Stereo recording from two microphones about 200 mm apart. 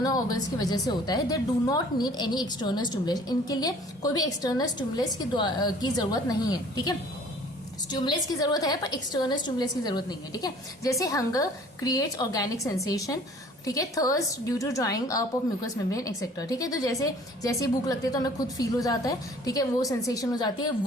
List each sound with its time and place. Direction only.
0.0 s a woman's voice: 20° left (ahead or behind)